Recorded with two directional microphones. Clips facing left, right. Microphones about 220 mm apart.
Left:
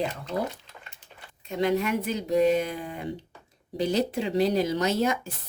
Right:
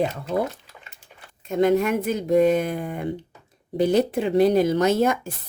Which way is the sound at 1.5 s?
50° right (ahead or behind).